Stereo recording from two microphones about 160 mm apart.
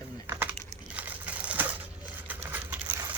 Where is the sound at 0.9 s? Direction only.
10° right (ahead or behind).